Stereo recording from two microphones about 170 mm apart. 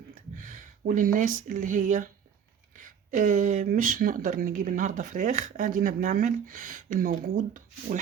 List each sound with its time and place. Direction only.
0.1 s speech: 50° right (ahead or behind)